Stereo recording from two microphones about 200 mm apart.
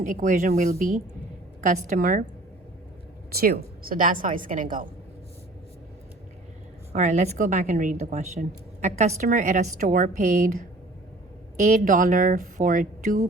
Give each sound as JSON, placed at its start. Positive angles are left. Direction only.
{"t": 0.0, "sound": "a woman's voice", "side_deg": -40}
{"t": 3.3, "sound": "a woman's voice", "side_deg": -50}
{"t": 6.9, "sound": "a woman's voice", "side_deg": -35}
{"t": 11.6, "sound": "a woman's voice", "side_deg": -40}